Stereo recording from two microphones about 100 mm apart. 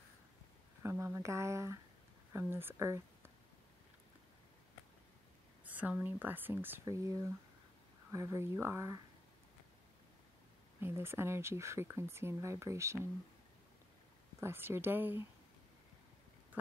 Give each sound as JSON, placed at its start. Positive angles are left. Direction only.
{"t": 0.8, "sound": "speech", "side_deg": -25}
{"t": 5.7, "sound": "speech", "side_deg": -15}
{"t": 6.8, "sound": "speech", "side_deg": -35}
{"t": 10.8, "sound": "speech", "side_deg": -25}
{"t": 14.4, "sound": "speech", "side_deg": -25}